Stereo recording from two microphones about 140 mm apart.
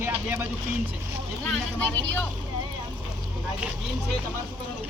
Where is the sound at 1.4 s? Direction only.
10° left (ahead or behind).